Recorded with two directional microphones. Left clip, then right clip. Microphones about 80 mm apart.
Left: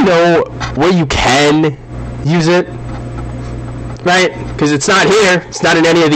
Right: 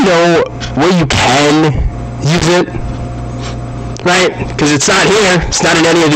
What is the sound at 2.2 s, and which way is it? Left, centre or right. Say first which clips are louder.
Speech: right 1 dB; right.